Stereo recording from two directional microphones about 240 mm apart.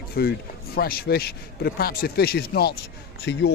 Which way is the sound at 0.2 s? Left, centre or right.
Left.